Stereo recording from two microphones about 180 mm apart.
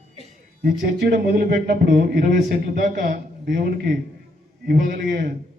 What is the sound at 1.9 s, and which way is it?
A man's voice, 45° right (ahead or behind).